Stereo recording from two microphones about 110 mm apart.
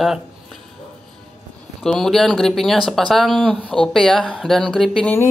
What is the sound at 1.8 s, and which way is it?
Speech, 5° left (ahead or behind).